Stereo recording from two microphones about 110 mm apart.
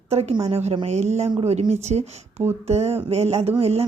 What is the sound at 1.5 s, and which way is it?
A woman's voice, 80° right.